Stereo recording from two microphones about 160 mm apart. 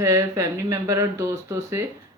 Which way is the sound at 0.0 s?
20° right (ahead or behind).